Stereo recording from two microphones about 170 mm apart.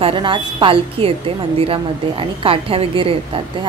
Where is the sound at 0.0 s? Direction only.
30° right (ahead or behind).